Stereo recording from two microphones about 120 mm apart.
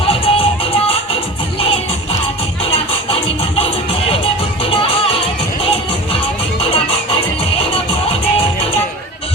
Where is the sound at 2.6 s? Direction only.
55° left (ahead or behind).